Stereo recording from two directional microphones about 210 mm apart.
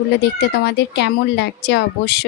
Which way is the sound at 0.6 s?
55° left (ahead or behind).